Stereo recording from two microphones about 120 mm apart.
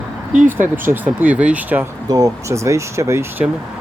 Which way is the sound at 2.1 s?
25° right (ahead or behind).